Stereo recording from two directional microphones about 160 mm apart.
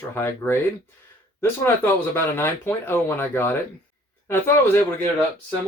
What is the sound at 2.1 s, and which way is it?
Speech, 15° left (ahead or behind).